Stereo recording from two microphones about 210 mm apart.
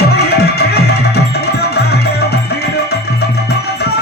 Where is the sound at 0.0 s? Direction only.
50° left (ahead or behind).